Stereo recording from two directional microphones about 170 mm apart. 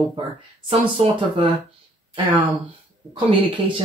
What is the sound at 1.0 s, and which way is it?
Speech, 35° right (ahead or behind).